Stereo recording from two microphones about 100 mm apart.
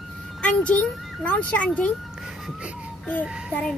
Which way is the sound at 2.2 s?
10° right (ahead or behind).